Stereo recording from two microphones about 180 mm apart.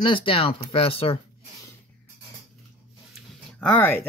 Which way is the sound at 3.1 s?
5° left (ahead or behind).